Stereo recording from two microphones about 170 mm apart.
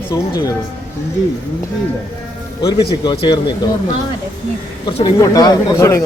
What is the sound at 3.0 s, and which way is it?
Speech, 25° left (ahead or behind).